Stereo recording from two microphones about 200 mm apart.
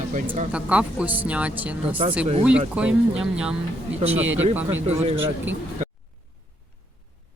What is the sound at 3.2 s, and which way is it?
Speech, 5° right (ahead or behind).